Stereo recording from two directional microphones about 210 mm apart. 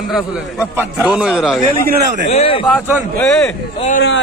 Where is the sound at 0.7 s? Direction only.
5° right (ahead or behind).